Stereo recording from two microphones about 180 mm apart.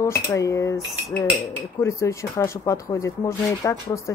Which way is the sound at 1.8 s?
15° left (ahead or behind).